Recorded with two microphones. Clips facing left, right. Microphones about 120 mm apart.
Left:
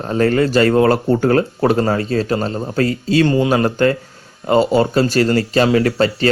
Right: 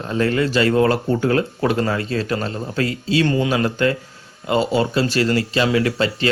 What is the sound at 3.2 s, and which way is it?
Speech, 30° left (ahead or behind).